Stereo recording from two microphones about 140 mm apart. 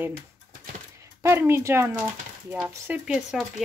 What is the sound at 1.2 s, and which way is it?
Speech, 20° right (ahead or behind).